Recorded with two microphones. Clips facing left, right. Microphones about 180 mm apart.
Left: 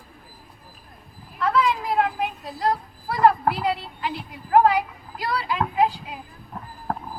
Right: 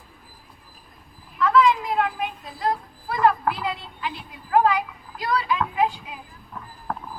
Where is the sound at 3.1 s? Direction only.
35° left (ahead or behind).